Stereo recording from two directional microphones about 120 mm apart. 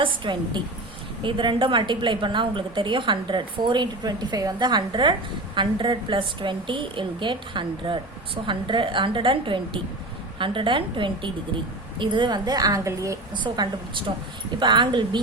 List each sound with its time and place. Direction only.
0.0 s a woman's voice: 40° right (ahead or behind)
13.3 s a woman's voice: 40° right (ahead or behind)